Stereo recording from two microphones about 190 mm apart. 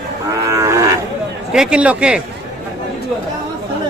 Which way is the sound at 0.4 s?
15° right (ahead or behind).